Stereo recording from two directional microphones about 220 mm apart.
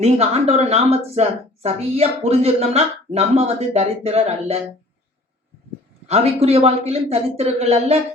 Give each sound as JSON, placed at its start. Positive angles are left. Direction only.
{"t": 0.0, "sound": "a woman's voice", "side_deg": -30}
{"t": 6.1, "sound": "a woman's voice", "side_deg": -30}